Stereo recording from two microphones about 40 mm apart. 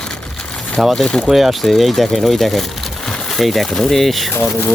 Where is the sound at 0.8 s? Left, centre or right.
Centre.